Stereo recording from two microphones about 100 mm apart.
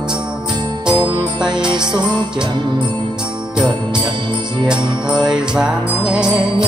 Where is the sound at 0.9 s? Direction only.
55° right (ahead or behind).